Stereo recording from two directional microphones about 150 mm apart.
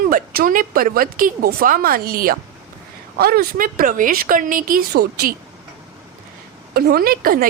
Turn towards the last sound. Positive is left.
turn(degrees=-75)  # may be behind; listen again after turning